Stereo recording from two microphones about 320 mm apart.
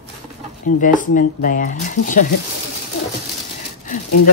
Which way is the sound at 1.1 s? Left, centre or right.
Left.